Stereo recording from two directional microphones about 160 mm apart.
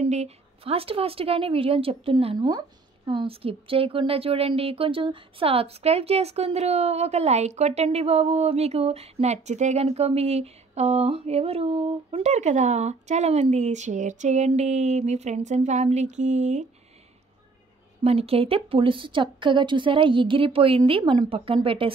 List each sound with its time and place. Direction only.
0.0 s a woman's voice: 40° right (ahead or behind)
18.0 s a woman's voice: 40° right (ahead or behind)